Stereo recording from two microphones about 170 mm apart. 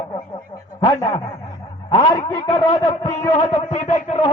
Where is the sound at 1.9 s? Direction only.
30° left (ahead or behind).